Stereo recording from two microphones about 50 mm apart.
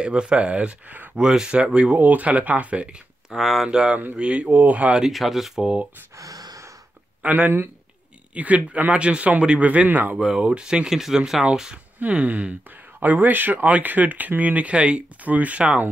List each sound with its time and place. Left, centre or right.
0.0 s speech: centre
1.1 s speech: centre
2.0 s speech: right
3.3 s speech: centre
3.6 s speech: centre
5.0 s speech: centre
7.2 s speech: right
8.4 s speech: right
10.1 s speech: centre
12.0 s speech: right